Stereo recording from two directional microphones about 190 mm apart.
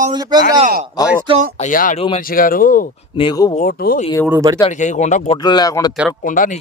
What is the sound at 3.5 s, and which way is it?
Speech, 50° left (ahead or behind).